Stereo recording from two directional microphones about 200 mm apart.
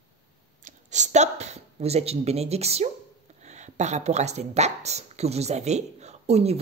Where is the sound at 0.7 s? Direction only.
35° right (ahead or behind).